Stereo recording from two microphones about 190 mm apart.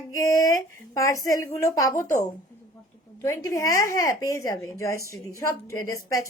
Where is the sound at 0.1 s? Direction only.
20° left (ahead or behind).